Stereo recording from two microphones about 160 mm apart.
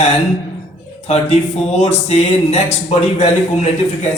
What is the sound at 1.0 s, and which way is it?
Speech, 45° left (ahead or behind).